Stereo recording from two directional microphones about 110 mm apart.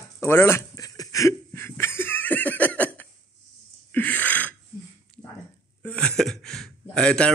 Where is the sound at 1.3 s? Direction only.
20° left (ahead or behind).